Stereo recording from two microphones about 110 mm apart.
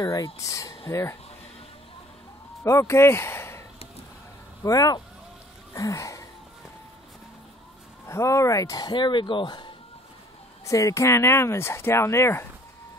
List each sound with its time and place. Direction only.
0.0 s speech: 30° left (ahead or behind)
2.6 s speech: 25° left (ahead or behind)
4.6 s speech: 35° left (ahead or behind)
5.8 s a sound: 30° left (ahead or behind)
8.1 s speech: 25° left (ahead or behind); by 9.7 s 45° left (ahead or behind)
10.6 s speech: 30° left (ahead or behind)